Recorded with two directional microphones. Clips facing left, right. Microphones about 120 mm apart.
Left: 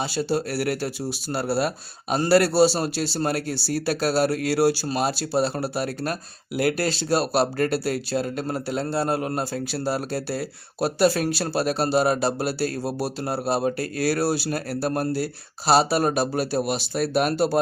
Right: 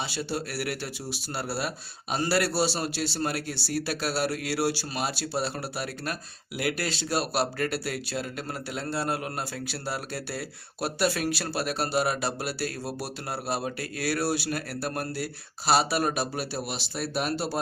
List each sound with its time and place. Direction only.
0.0 s speech: 40° left (ahead or behind)